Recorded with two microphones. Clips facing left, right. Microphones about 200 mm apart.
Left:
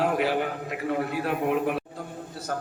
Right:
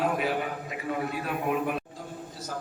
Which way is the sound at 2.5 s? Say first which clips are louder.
Left 5 dB; 60° left (ahead or behind).